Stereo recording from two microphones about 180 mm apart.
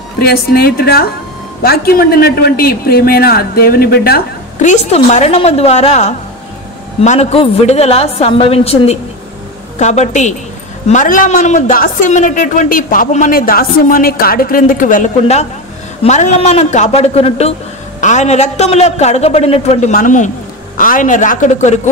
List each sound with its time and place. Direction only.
0.2 s speech: 60° left (ahead or behind)
4.6 s a man's voice: 40° left (ahead or behind)